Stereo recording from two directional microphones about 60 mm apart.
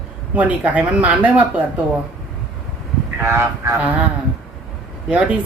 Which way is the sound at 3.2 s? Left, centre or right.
Right.